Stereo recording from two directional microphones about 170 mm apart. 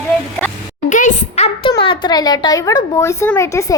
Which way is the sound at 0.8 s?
50° left (ahead or behind).